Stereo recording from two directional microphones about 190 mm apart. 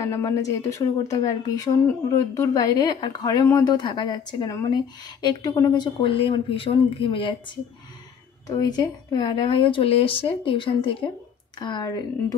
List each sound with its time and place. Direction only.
0.0 s a woman's voice: 15° left (ahead or behind)
8.5 s a woman's voice: 20° left (ahead or behind)